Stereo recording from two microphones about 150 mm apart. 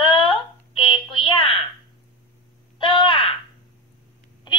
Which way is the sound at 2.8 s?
30° left (ahead or behind).